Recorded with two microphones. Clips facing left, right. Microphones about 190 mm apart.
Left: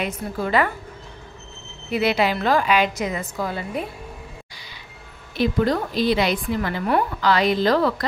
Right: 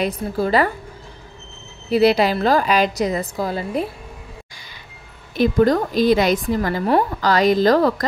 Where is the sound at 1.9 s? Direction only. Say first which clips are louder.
Right 5 dB; 35° right (ahead or behind).